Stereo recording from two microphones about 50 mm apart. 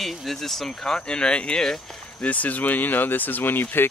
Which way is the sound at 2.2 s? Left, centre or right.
Left.